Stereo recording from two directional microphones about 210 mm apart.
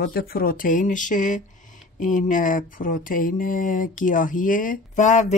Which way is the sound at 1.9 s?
40° left (ahead or behind).